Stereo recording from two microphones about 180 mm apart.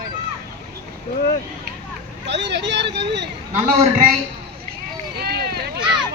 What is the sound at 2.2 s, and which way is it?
Vehicle, 75° right (ahead or behind).